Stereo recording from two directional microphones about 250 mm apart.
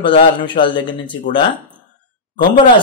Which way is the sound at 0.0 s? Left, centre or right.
Centre.